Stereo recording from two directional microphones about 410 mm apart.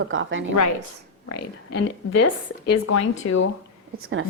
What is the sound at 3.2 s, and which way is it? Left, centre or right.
Speech, left.